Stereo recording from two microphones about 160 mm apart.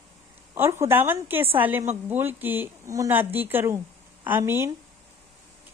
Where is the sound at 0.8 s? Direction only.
15° right (ahead or behind).